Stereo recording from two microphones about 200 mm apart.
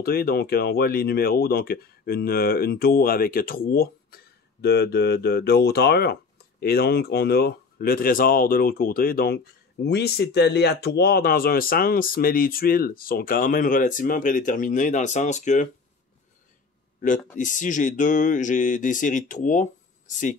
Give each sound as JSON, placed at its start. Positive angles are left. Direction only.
{"t": 0.0, "sound": "speech", "side_deg": 50}
{"t": 17.4, "sound": "speech", "side_deg": 40}